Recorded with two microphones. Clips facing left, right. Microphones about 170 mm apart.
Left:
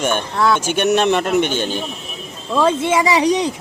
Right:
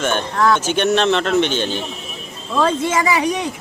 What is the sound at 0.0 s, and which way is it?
Speech, 10° left (ahead or behind).